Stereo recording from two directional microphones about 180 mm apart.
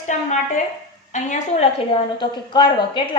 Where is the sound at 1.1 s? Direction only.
40° left (ahead or behind).